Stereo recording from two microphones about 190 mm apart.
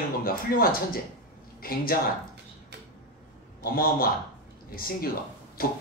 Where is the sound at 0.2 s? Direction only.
50° left (ahead or behind).